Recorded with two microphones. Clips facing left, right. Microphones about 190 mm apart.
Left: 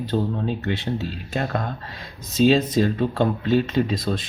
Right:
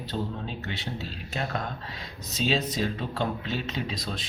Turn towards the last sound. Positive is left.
turn(degrees=50)  # may be behind; listen again after turning